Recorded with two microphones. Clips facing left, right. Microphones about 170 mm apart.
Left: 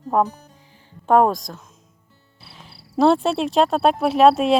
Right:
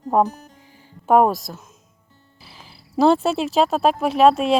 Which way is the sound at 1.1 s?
5° right (ahead or behind).